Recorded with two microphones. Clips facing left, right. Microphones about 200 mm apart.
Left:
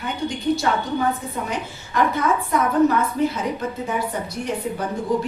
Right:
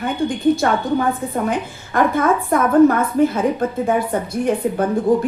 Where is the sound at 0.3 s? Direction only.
50° right (ahead or behind).